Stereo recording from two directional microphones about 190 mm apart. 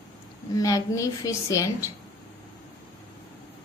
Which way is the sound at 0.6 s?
20° left (ahead or behind).